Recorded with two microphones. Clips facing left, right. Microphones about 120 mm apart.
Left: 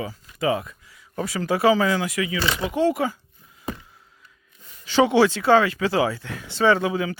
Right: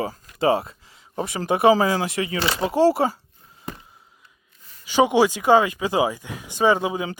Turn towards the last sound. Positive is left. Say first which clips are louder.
# even
turn(degrees=-20)  # may be behind; listen again after turning